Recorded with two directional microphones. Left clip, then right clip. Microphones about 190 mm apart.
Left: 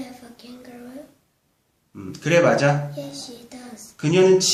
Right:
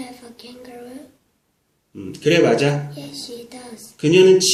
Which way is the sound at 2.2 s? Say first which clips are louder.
Right 2 dB; 65° left (ahead or behind).